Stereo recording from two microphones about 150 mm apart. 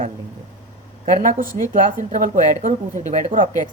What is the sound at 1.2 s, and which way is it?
Speech, 60° right (ahead or behind).